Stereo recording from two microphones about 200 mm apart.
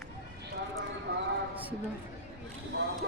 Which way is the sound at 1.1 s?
60° right (ahead or behind).